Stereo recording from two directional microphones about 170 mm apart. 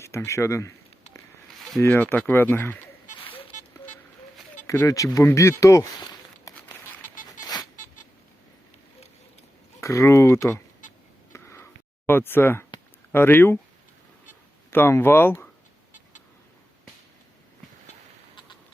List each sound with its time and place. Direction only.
0.0 s speech: 15° left (ahead or behind)
1.8 s speech: 10° left (ahead or behind)
3.2 s a sound: 30° left (ahead or behind)
4.6 s speech: 20° left (ahead or behind)
7.4 s a sound: 20° left (ahead or behind)
9.8 s speech: 15° left (ahead or behind)
11.3 s a sound: 15° left (ahead or behind)
13.1 s speech: 15° left (ahead or behind)
14.7 s speech: 15° left (ahead or behind)